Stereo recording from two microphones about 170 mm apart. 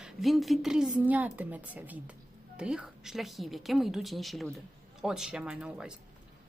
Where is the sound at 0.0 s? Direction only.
Centre (ahead or behind).